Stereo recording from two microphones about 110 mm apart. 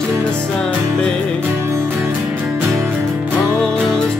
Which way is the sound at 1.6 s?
20° right (ahead or behind).